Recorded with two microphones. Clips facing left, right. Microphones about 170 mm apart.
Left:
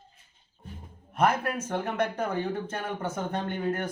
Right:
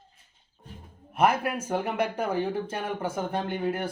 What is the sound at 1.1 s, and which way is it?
Speech, 10° right (ahead or behind).